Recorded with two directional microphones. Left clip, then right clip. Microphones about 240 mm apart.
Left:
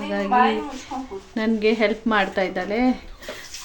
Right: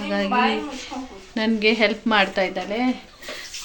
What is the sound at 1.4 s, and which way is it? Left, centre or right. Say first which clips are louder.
Speech: right 1 dB; centre.